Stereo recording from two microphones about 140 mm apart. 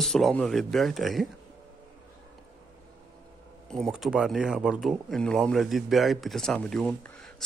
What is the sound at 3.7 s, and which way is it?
Speech, centre (ahead or behind).